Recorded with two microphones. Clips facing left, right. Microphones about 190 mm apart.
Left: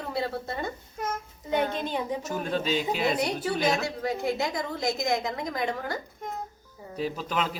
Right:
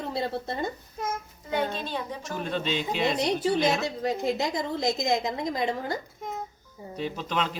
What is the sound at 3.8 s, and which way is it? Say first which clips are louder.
A woman's voice: right 1 dB; 20° right (ahead or behind).